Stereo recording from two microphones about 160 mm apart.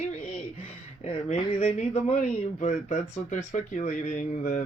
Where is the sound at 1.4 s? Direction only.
35° left (ahead or behind).